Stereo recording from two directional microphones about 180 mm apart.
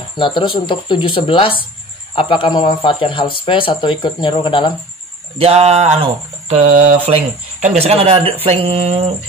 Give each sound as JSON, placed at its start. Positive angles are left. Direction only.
{"t": 0.2, "sound": "speech", "side_deg": 25}
{"t": 5.4, "sound": "speech", "side_deg": -35}